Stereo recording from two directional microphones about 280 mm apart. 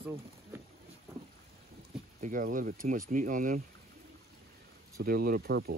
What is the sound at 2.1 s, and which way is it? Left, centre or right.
Speech, right.